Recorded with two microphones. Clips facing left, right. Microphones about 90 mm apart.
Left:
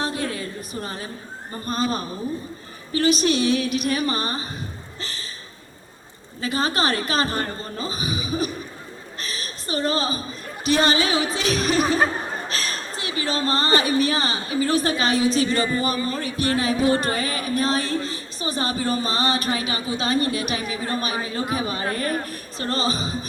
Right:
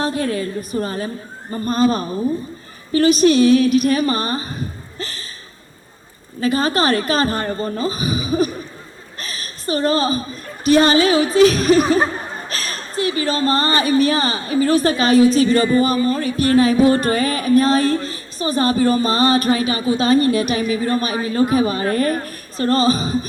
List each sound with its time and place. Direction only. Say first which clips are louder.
0.0 s a woman's voice: right 6 dB; 45° right (ahead or behind)
4.9 s a sound: right 5 dB; 45° right (ahead or behind)
6.4 s a woman's voice: right 6 dB; 45° right (ahead or behind)
9.1 s chuckle: right 2 dB; 45° right (ahead or behind)
10.6 s a woman's voice: right 7 dB; 45° right (ahead or behind)